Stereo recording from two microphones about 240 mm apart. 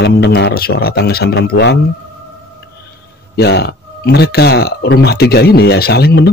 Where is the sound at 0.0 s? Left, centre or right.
Left.